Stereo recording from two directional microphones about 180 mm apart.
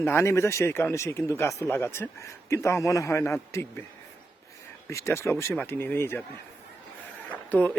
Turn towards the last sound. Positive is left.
turn(degrees=10)  # may be behind; listen again after turning